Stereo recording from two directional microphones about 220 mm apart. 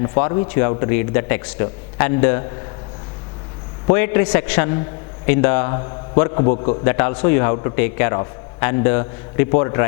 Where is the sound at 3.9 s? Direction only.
15° left (ahead or behind).